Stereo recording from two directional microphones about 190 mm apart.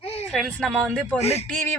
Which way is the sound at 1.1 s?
35° left (ahead or behind).